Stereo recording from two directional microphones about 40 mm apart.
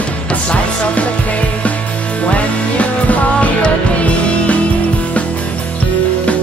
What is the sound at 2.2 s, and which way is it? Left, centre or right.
Music, left.